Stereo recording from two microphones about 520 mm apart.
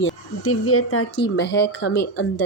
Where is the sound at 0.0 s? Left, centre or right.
Left.